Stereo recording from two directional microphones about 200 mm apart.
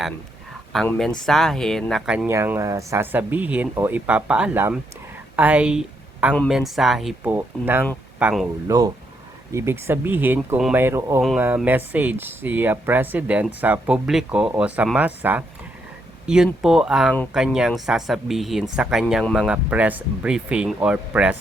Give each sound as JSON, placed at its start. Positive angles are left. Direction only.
{"t": 0.7, "sound": "speech", "side_deg": 0}
{"t": 8.6, "sound": "speech", "side_deg": -15}